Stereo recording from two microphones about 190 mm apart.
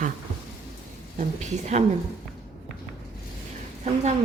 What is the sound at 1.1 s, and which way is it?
Speech, 40° right (ahead or behind).